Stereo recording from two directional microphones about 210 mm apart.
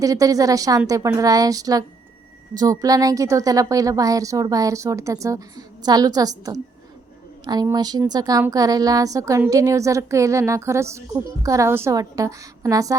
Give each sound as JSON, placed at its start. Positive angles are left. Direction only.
{"t": 0.0, "sound": "a woman's voice", "side_deg": -15}